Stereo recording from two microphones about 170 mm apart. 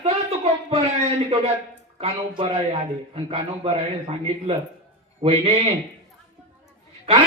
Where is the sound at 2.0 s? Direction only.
35° right (ahead or behind).